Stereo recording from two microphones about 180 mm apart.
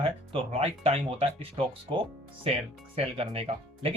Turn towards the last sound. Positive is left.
turn(degrees=-35)  # may be behind; listen again after turning